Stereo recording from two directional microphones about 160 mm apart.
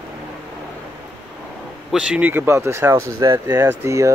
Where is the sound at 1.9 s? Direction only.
5° right (ahead or behind).